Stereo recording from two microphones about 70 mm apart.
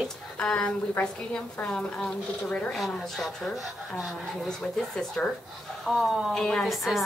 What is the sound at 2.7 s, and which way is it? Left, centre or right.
Speech, centre.